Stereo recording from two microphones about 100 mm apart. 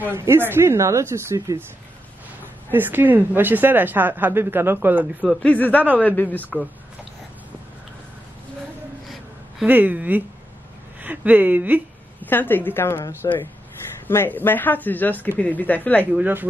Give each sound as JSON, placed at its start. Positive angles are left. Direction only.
{"t": 0.0, "sound": "speech", "side_deg": -25}
{"t": 2.7, "sound": "speech", "side_deg": -20}
{"t": 5.2, "sound": "speech", "side_deg": 10}
{"t": 9.7, "sound": "speech", "side_deg": -15}
{"t": 11.0, "sound": "a sound", "side_deg": -15}
{"t": 12.3, "sound": "speech", "side_deg": 20}
{"t": 16.1, "sound": "speech", "side_deg": -15}